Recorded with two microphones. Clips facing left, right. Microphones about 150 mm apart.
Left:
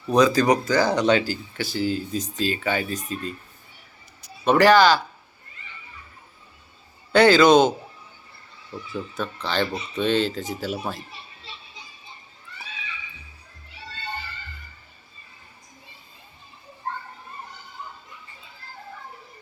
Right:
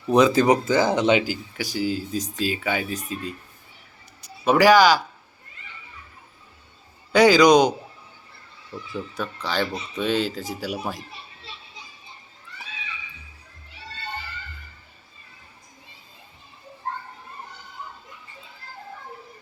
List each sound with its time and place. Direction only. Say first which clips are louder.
0.1 s speech: right 1 dB; 20° right (ahead or behind)
4.4 s speech: even; 10° right (ahead or behind)
7.1 s speech: even; 10° right (ahead or behind)
9.1 s speech: left 1 dB; 10° right (ahead or behind)